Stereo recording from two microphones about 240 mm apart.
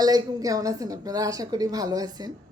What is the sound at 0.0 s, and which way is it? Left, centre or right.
Speech, centre.